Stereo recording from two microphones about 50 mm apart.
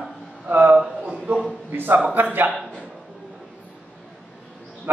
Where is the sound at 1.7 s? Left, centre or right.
Right.